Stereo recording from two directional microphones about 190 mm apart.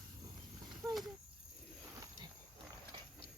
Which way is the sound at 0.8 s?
15° right (ahead or behind).